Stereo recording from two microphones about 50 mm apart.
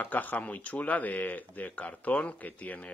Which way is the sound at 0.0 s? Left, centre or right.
Left.